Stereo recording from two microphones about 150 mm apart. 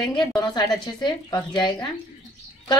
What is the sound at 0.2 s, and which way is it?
A woman's voice, 25° left (ahead or behind).